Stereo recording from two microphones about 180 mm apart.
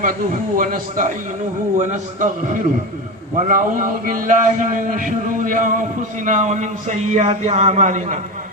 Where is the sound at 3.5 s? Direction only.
50° right (ahead or behind).